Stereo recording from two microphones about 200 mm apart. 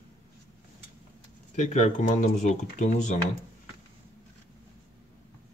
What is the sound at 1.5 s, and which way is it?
Speech, 35° left (ahead or behind).